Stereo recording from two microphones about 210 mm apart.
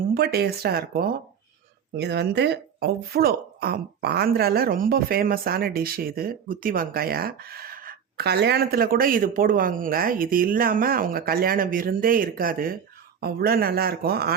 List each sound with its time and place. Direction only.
0.1 s speech: 50° right (ahead or behind)